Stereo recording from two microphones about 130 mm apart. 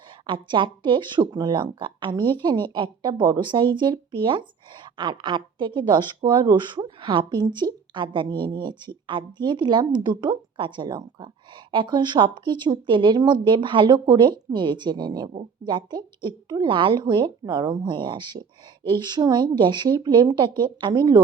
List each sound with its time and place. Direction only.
0.3 s speech: 35° right (ahead or behind)